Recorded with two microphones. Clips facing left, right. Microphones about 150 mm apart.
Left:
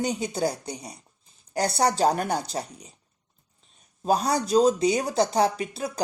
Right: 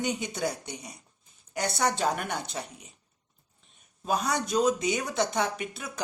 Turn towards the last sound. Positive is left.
turn(degrees=35)  # may be behind; listen again after turning